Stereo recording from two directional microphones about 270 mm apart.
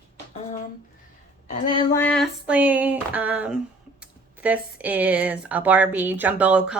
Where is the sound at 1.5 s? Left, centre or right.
Centre.